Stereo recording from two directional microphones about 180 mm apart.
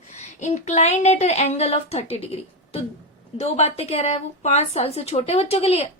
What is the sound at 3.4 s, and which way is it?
A woman's voice, 35° left (ahead or behind).